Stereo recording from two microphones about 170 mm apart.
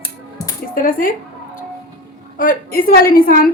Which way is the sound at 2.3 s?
55° left (ahead or behind).